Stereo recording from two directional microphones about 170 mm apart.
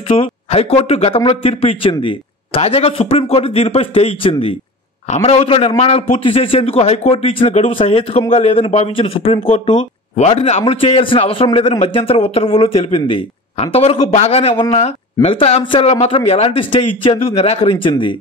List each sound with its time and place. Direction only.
0.1 s a man's voice: 35° left (ahead or behind)